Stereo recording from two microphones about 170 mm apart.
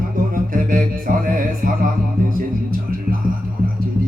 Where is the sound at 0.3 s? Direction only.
55° right (ahead or behind).